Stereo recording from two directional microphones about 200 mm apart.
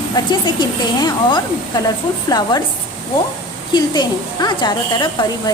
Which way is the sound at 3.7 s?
20° left (ahead or behind).